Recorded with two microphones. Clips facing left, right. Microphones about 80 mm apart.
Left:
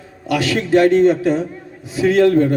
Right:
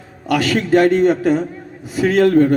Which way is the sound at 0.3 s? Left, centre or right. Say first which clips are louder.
Right 1 dB; right.